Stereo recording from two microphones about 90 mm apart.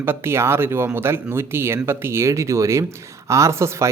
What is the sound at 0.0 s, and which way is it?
Speech, 25° right (ahead or behind).